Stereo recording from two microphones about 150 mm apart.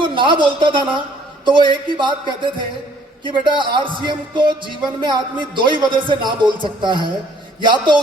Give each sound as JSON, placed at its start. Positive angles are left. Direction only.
{"t": 0.0, "sound": "a man's voice", "side_deg": -35}